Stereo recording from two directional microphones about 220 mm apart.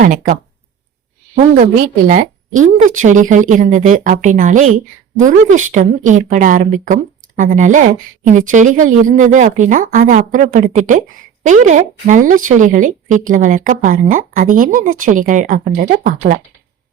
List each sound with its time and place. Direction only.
0.0 s a woman's voice: 40° right (ahead or behind)
1.4 s a woman's voice: 35° right (ahead or behind)